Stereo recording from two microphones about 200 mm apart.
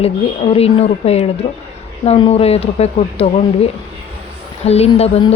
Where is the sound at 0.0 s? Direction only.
30° left (ahead or behind).